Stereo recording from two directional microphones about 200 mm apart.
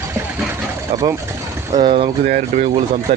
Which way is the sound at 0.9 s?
25° right (ahead or behind).